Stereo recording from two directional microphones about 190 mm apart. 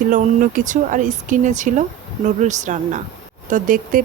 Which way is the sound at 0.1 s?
40° right (ahead or behind).